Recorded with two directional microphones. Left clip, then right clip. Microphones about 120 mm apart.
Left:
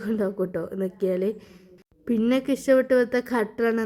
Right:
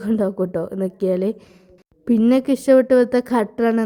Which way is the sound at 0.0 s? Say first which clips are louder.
Right 5 dB; 30° right (ahead or behind).